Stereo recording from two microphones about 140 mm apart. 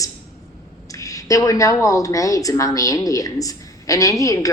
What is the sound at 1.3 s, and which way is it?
A woman's voice, 25° left (ahead or behind).